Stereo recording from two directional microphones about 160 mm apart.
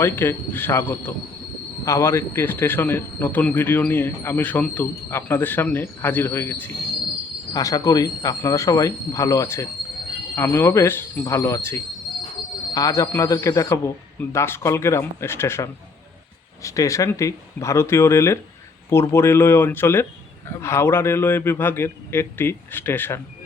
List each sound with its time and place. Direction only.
0.0 s speech: 15° left (ahead or behind)